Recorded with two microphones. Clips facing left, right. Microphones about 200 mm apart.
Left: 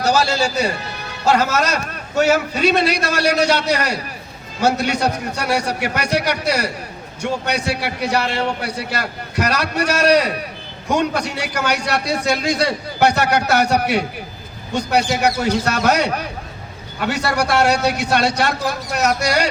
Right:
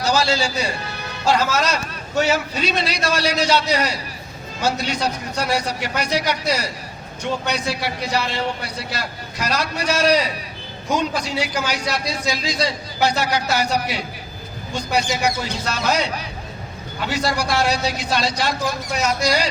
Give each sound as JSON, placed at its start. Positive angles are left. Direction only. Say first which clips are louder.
{"t": 0.0, "sound": "a man's voice", "louder": "left 2 dB", "side_deg": 45}
{"t": 1.5, "sound": "a man's voice", "louder": "left 2 dB", "side_deg": 55}